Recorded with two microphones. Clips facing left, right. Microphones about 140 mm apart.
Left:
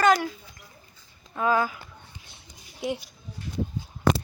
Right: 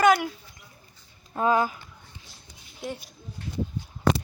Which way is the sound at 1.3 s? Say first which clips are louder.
Right 1 dB; 25° right (ahead or behind).